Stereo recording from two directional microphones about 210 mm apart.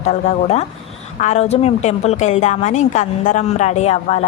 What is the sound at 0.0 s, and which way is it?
A woman's voice, 35° left (ahead or behind).